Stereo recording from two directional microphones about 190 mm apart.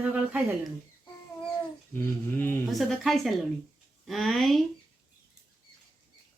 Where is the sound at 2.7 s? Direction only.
Centre (ahead or behind).